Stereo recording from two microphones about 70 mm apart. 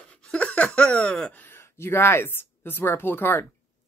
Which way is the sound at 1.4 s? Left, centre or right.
Left.